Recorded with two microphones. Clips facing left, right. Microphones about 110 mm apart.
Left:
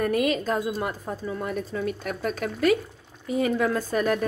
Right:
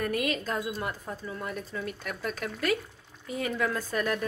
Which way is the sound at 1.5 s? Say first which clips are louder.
Left 7 dB; 35° left (ahead or behind).